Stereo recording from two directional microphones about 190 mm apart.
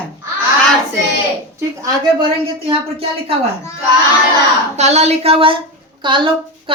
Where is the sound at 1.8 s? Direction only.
25° right (ahead or behind).